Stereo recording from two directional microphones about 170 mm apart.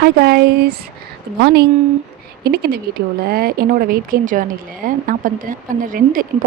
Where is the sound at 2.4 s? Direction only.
70° right (ahead or behind).